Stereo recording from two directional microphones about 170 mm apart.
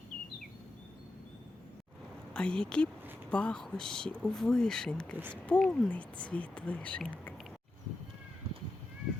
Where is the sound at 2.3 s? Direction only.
5° left (ahead or behind).